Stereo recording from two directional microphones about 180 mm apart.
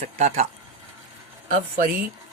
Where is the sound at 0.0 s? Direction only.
40° right (ahead or behind).